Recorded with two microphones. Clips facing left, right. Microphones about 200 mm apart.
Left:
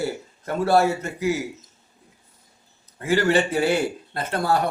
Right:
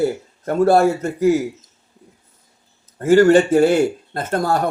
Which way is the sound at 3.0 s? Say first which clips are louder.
Right 9 dB; 45° right (ahead or behind).